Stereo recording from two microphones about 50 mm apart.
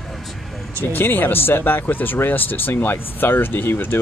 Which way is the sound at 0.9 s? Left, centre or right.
Left.